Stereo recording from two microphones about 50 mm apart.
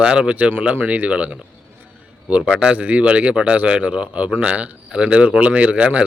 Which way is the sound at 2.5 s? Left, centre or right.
Right.